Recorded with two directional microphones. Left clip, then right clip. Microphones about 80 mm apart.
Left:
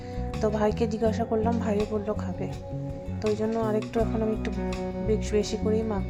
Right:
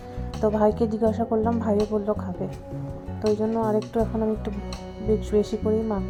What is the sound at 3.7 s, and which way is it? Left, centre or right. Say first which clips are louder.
Speech: right 3 dB; right.